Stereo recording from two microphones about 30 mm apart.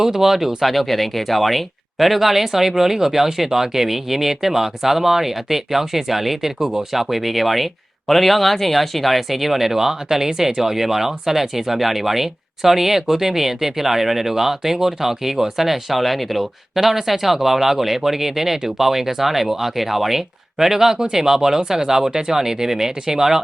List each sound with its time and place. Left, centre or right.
0.0 s speech: centre